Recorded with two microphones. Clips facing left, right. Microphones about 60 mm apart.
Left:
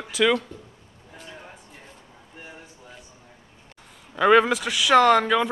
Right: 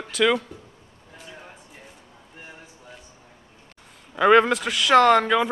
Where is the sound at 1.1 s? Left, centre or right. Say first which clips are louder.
Left 1 dB; centre.